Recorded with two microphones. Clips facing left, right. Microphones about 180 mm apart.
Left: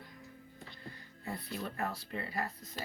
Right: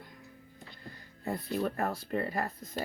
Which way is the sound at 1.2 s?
45° right (ahead or behind).